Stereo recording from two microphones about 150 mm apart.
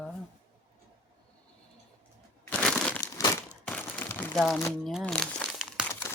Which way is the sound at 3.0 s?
20° left (ahead or behind).